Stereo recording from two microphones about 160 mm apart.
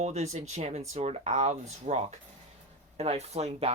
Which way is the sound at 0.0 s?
45° right (ahead or behind).